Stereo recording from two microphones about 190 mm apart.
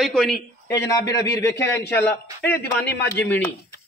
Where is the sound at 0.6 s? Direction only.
15° left (ahead or behind).